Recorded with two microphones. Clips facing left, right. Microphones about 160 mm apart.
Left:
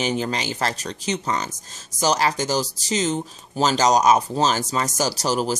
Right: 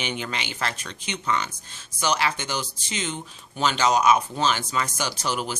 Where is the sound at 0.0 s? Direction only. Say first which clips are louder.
Left 7 dB; 35° left (ahead or behind).